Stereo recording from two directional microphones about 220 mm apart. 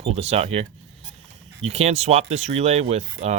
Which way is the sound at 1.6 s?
30° right (ahead or behind).